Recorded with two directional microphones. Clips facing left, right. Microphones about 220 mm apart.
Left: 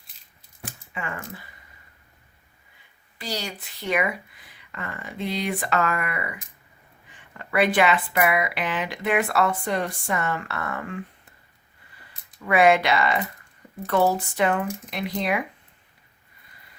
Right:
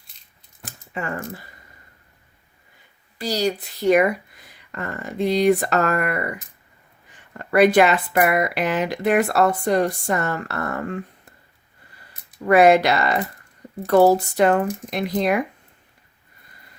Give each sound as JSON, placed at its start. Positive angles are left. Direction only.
{"t": 0.6, "sound": "speech", "side_deg": -40}
{"t": 3.2, "sound": "speech", "side_deg": -40}
{"t": 12.4, "sound": "speech", "side_deg": -40}